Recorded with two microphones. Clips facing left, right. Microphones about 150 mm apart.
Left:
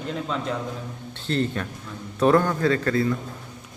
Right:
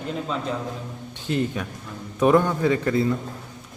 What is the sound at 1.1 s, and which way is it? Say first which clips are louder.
A man's voice: even; 15° right (ahead or behind).